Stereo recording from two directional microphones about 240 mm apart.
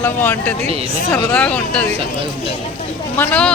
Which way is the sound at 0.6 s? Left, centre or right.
Right.